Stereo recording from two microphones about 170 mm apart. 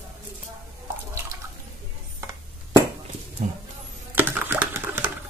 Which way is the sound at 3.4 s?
45° right (ahead or behind).